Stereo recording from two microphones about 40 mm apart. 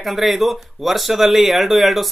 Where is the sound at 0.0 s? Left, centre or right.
Centre.